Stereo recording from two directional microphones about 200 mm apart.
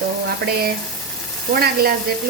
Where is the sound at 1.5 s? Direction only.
50° right (ahead or behind).